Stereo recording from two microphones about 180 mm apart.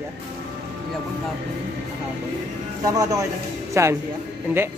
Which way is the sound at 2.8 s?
20° right (ahead or behind).